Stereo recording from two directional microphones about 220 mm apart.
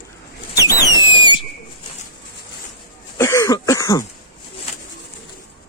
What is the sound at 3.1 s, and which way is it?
Cough, 10° left (ahead or behind).